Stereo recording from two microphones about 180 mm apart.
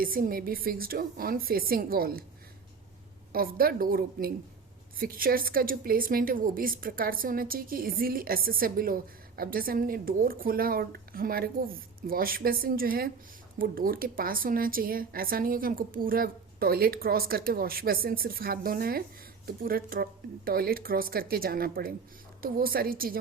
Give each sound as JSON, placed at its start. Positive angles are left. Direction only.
{"t": 0.0, "sound": "speech", "side_deg": -50}
{"t": 3.3, "sound": "a woman's voice", "side_deg": -55}